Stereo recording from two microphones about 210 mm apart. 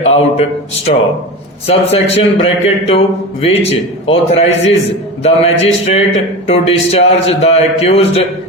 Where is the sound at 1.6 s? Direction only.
30° left (ahead or behind).